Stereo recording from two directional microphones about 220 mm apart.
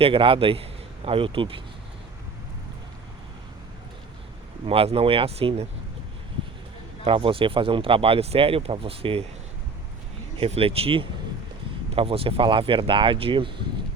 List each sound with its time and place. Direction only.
0.0 s speech: 25° right (ahead or behind)
4.6 s speech: 25° right (ahead or behind)
7.0 s speech: 25° right (ahead or behind)
10.3 s speech: 25° right (ahead or behind)